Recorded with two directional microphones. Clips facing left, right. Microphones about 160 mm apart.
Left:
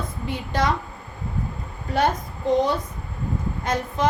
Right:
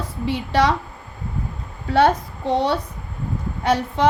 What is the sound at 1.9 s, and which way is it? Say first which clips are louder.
Speech: right 6 dB; 90° right.